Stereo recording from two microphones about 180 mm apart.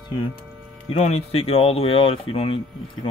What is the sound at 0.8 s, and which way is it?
Speech, 35° left (ahead or behind).